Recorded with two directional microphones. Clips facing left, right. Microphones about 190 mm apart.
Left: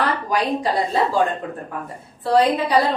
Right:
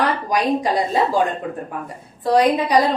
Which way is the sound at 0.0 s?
15° right (ahead or behind).